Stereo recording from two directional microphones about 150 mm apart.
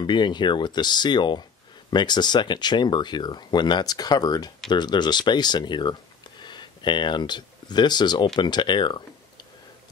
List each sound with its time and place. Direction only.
0.0 s speech: 30° left (ahead or behind)